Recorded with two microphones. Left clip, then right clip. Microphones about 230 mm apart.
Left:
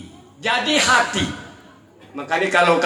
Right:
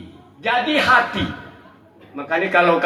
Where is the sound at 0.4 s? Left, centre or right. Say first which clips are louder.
Right 1 dB; left.